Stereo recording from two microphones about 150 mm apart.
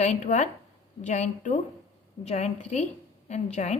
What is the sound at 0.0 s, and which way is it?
A woman's voice, 50° left (ahead or behind).